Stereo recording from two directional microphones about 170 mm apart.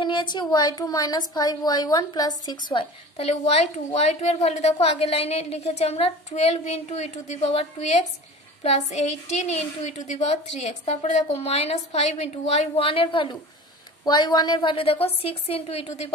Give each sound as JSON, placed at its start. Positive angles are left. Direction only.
{"t": 0.0, "sound": "speech", "side_deg": 25}